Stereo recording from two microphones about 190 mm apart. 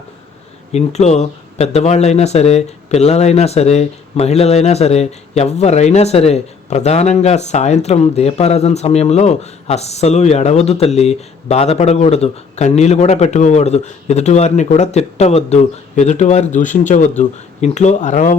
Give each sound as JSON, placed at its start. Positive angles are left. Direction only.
{"t": 0.7, "sound": "speech", "side_deg": 35}